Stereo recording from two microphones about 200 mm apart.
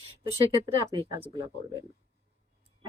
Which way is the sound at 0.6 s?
20° right (ahead or behind).